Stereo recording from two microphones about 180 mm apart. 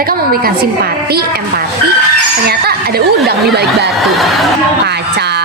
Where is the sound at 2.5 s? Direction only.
60° right (ahead or behind).